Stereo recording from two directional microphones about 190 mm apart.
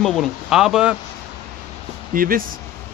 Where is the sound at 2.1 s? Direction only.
50° right (ahead or behind).